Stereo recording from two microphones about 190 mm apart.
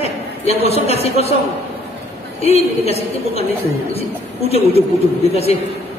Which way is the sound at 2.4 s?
30° left (ahead or behind).